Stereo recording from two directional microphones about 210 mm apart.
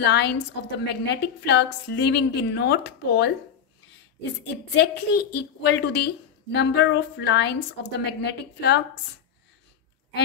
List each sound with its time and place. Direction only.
0.0 s a woman's voice: 55° left (ahead or behind)